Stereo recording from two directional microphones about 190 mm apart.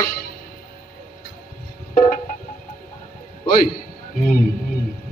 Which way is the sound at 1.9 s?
40° left (ahead or behind).